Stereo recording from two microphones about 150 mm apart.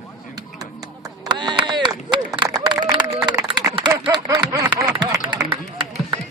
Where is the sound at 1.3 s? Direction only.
30° right (ahead or behind).